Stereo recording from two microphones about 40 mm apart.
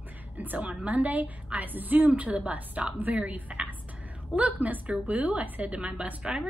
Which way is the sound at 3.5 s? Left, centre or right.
Right.